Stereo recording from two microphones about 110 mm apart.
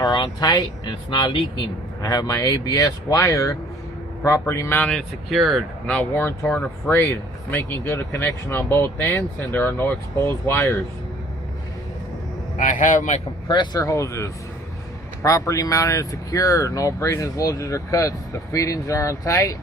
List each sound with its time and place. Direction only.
0.0 s speech: 35° left (ahead or behind)
4.8 s speech: 5° left (ahead or behind)
5.8 s speech: 15° left (ahead or behind)
13.5 s speech: 45° left (ahead or behind)
13.8 s speech: 30° left (ahead or behind)